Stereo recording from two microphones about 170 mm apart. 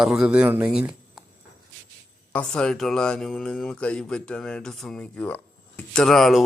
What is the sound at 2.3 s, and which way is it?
Speech, 5° left (ahead or behind).